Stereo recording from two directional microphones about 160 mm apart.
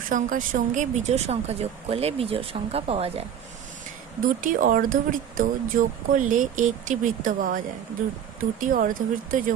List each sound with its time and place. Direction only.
0.1 s a woman's voice: 55° right (ahead or behind); by 3.2 s 35° right (ahead or behind)
4.2 s speech: 60° right (ahead or behind)
8.6 s speech: 60° right (ahead or behind)